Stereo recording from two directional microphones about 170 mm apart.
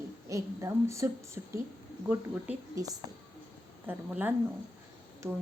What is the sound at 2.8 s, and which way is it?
A woman's voice, 20° right (ahead or behind).